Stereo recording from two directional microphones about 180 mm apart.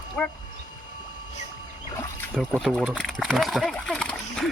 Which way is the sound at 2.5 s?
5° left (ahead or behind).